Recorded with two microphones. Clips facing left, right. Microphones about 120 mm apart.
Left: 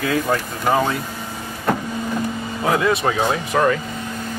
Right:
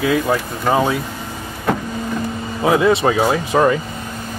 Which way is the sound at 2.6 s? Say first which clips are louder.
Right 4 dB; 15° right (ahead or behind).